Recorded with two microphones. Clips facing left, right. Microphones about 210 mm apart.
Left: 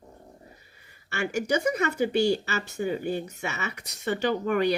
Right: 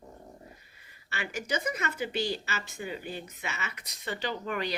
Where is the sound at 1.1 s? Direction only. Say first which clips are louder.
Left 8 dB; 50° left (ahead or behind).